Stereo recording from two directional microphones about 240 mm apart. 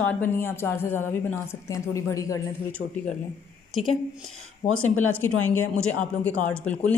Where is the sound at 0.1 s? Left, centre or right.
Centre.